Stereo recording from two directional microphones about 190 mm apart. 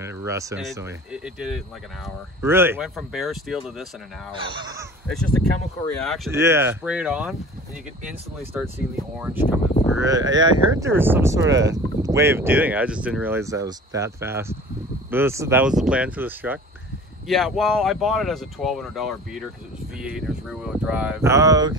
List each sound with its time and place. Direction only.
0.0 s a sound: 15° right (ahead or behind)
1.1 s speech: 5° right (ahead or behind)
2.8 s speech: centre (ahead or behind)
4.4 s speech: 25° right (ahead or behind)
6.0 s speech: centre (ahead or behind)
6.3 s speech: 15° right (ahead or behind)
8.5 s speech: 10° right (ahead or behind)
9.9 s speech: 20° right (ahead or behind)
17.3 s speech: centre (ahead or behind); by 21.7 s 20° right (ahead or behind)